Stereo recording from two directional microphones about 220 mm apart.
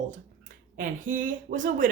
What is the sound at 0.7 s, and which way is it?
Speech, 40° right (ahead or behind).